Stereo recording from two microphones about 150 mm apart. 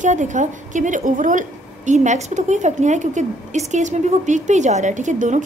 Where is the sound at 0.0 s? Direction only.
55° right (ahead or behind).